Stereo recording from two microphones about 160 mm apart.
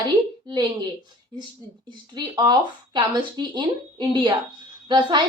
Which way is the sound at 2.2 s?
25° right (ahead or behind).